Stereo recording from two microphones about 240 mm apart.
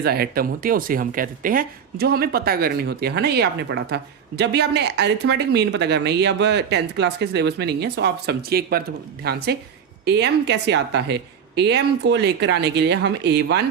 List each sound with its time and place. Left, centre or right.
0.0 s a woman's voice: right